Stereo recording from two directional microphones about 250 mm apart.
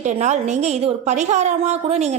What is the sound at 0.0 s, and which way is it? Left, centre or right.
A woman's voice, right.